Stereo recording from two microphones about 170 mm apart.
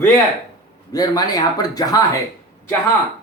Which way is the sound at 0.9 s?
20° left (ahead or behind).